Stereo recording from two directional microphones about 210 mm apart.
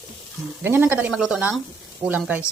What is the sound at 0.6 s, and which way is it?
Speech, 10° right (ahead or behind).